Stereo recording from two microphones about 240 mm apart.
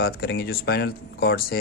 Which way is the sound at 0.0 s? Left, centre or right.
Left.